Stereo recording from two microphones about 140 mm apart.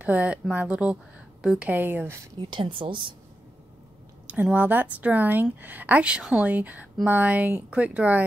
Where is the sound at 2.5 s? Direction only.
40° right (ahead or behind).